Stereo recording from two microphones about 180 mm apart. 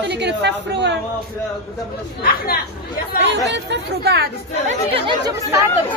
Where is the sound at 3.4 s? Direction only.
75° right (ahead or behind).